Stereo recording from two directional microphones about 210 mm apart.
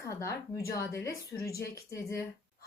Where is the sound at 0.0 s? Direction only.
15° left (ahead or behind).